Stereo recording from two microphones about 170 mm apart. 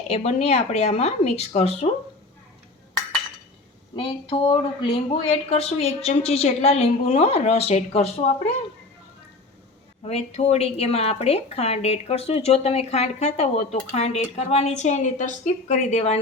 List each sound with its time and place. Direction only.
0.1 s a woman's voice: 40° left (ahead or behind)
3.9 s a woman's voice: 30° left (ahead or behind)
10.0 s a woman's voice: 40° left (ahead or behind)